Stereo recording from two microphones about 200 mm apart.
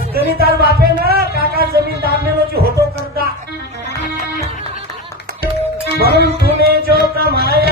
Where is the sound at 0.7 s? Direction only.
50° right (ahead or behind).